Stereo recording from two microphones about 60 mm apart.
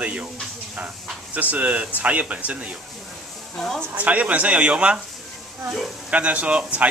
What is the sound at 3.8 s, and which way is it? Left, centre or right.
Speech, right.